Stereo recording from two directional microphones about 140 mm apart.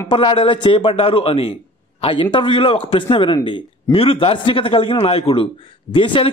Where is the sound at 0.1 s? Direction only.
40° left (ahead or behind).